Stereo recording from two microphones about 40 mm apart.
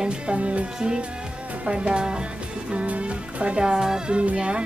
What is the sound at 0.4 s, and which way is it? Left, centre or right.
Music, right.